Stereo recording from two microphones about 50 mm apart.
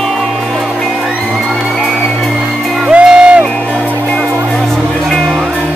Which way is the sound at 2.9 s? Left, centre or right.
Right.